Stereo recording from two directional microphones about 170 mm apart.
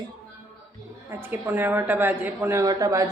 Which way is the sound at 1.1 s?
15° right (ahead or behind).